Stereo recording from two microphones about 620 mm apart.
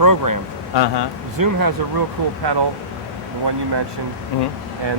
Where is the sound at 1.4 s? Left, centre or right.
Right.